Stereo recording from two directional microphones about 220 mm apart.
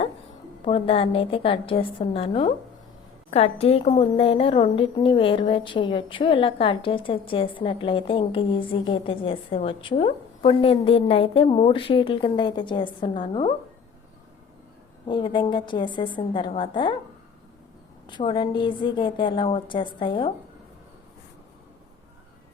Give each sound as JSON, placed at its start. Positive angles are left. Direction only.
{"t": 0.6, "sound": "a woman's voice", "side_deg": 25}
{"t": 15.0, "sound": "a woman's voice", "side_deg": 20}
{"t": 18.1, "sound": "a woman's voice", "side_deg": 20}